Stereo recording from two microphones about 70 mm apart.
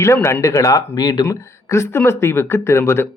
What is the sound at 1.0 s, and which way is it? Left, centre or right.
Speech, left.